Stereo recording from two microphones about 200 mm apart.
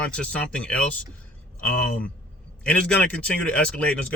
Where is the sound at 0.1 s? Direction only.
5° left (ahead or behind).